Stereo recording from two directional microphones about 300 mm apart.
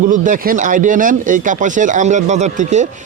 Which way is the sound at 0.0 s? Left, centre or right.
Right.